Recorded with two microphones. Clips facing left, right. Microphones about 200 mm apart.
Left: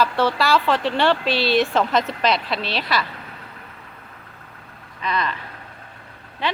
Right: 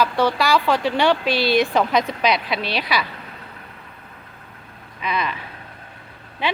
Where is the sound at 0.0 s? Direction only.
15° right (ahead or behind).